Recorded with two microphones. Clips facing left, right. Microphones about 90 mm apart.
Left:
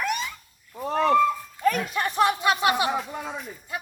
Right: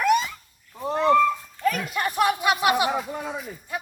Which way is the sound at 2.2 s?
15° right (ahead or behind).